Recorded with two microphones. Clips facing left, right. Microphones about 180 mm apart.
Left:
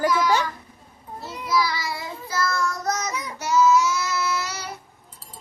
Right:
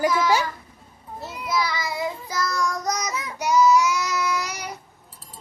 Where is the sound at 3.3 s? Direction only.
15° right (ahead or behind).